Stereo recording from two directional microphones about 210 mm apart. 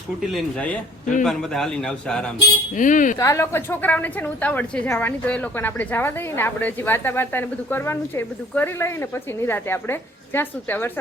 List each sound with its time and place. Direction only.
0.2 s a man's voice: centre (ahead or behind)
2.7 s speech: 40° left (ahead or behind)
3.2 s a woman's voice: 15° left (ahead or behind)